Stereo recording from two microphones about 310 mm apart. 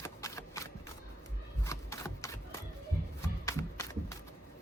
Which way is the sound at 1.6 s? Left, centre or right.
Centre.